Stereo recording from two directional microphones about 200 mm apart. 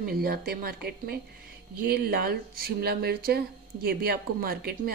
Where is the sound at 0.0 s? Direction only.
50° right (ahead or behind).